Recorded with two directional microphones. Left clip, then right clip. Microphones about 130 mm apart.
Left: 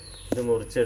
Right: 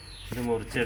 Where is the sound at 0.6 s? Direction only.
25° right (ahead or behind).